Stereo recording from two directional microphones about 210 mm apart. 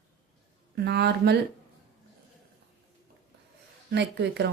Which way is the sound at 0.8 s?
50° right (ahead or behind).